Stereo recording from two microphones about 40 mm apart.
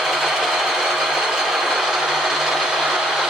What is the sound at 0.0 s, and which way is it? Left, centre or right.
Sewing machine, centre.